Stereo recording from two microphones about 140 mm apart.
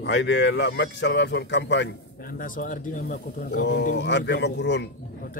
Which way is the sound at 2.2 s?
85° left.